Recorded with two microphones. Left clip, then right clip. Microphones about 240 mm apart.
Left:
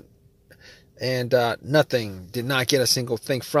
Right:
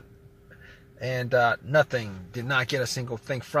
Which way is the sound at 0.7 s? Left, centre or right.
Left.